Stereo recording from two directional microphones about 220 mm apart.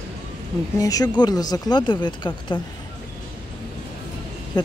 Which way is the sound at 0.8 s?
15° left (ahead or behind).